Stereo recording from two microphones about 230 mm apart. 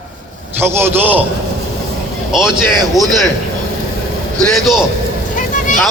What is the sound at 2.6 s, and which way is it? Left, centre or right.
Speech, centre.